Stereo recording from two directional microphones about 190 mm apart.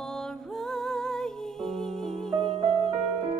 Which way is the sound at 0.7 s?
Centre (ahead or behind).